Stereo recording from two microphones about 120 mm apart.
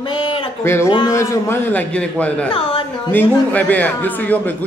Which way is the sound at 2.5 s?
50° left (ahead or behind).